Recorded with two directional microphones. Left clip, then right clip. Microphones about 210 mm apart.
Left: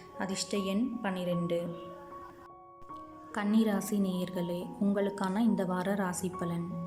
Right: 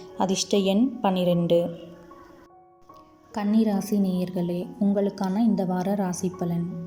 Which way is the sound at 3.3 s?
5° right (ahead or behind).